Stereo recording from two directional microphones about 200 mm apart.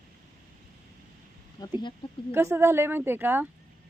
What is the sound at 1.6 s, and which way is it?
Speech, 20° left (ahead or behind).